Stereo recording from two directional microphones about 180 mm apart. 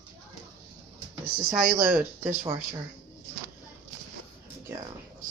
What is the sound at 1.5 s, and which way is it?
Speech, 10° right (ahead or behind).